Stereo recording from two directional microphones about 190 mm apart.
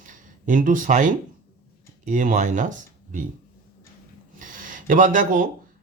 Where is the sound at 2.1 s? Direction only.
40° right (ahead or behind).